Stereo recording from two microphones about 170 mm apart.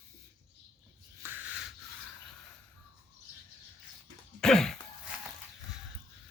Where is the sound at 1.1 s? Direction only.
10° right (ahead or behind).